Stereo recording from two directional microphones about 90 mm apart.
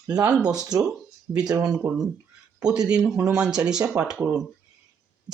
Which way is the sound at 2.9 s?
5° right (ahead or behind).